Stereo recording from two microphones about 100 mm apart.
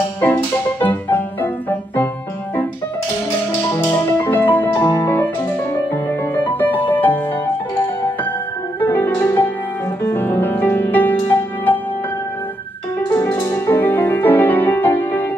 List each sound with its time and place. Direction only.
0.2 s music: 20° left (ahead or behind)
3.7 s music: 35° left (ahead or behind)
4.2 s music: 20° left (ahead or behind)
6.3 s music: 20° left (ahead or behind)
8.7 s music: 20° left (ahead or behind)
13.1 s music: 30° left (ahead or behind)